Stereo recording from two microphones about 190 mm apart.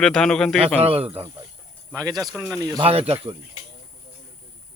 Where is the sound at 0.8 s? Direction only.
30° right (ahead or behind).